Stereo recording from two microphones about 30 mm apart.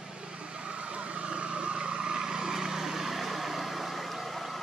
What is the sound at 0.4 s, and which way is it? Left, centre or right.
Vehicle, right.